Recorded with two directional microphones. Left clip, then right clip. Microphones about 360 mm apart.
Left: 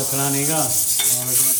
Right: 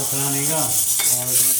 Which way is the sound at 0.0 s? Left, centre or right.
Centre.